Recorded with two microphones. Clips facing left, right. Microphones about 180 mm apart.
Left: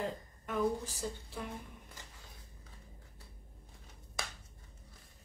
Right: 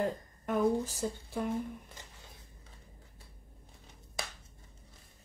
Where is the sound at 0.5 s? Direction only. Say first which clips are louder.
Right 5 dB; 50° right (ahead or behind).